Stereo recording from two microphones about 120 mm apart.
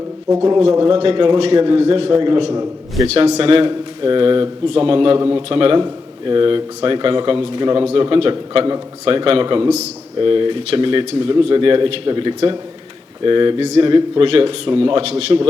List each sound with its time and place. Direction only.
0.7 s speech: 45° right (ahead or behind)
3.1 s speech: 60° right (ahead or behind)